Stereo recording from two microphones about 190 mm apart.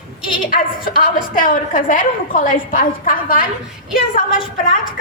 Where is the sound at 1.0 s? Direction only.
45° left (ahead or behind).